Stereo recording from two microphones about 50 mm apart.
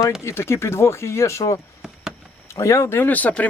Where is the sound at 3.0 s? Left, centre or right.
Left.